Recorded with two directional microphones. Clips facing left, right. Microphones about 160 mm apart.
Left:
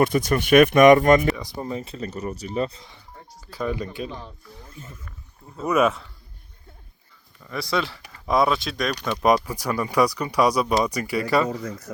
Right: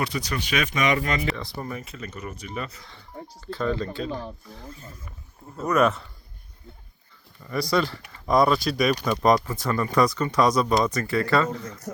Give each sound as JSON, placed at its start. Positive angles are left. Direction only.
{"t": 0.0, "sound": "speech", "side_deg": 50}
{"t": 1.4, "sound": "speech", "side_deg": 20}
{"t": 3.4, "sound": "speech", "side_deg": 10}
{"t": 5.6, "sound": "speech", "side_deg": 5}
{"t": 7.4, "sound": "speech", "side_deg": 0}
{"t": 9.2, "sound": "speech", "side_deg": 10}